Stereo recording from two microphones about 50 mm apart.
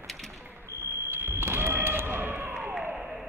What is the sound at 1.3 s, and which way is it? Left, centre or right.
Basketball bounce, right.